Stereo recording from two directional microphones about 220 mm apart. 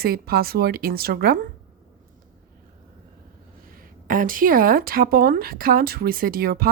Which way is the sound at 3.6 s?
40° right (ahead or behind).